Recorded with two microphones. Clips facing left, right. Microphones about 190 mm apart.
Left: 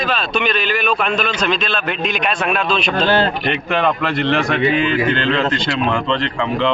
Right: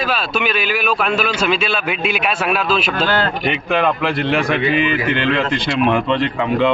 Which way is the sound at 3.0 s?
20° left (ahead or behind).